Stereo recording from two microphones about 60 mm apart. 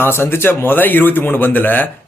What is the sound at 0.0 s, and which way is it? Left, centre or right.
Speech, left.